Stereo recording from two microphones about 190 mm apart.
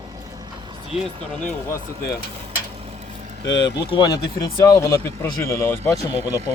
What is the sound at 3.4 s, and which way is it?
Speech, 70° left (ahead or behind).